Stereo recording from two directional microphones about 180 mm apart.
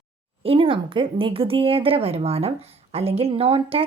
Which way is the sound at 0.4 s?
30° right (ahead or behind).